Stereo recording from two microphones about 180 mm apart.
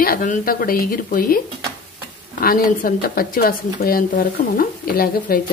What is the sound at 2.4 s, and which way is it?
Speech, 55° left (ahead or behind).